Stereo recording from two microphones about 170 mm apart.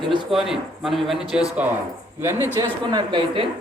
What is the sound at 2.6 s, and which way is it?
Speech, 25° right (ahead or behind).